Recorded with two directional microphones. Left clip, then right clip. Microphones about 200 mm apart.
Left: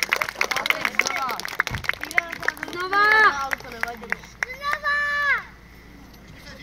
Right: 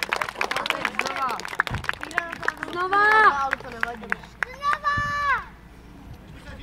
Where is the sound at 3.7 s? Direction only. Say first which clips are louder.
Even; 50° right (ahead or behind).